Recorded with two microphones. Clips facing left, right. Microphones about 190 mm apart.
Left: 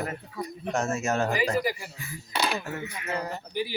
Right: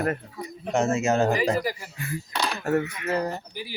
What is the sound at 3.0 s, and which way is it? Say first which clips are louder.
Speech: right 6 dB; 35° right (ahead or behind).